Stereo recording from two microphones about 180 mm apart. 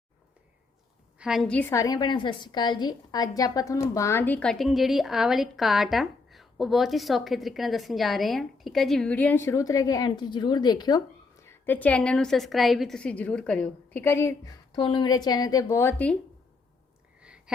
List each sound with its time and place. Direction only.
1.2 s a woman's voice: centre (ahead or behind)
1.7 s a woman's voice: 20° left (ahead or behind)
14.8 s a woman's voice: 25° left (ahead or behind); by 16.1 s 10° left (ahead or behind)
17.2 s a sound: 5° right (ahead or behind)